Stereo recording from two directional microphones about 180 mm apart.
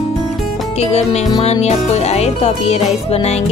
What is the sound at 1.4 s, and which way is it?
Music, 35° left (ahead or behind).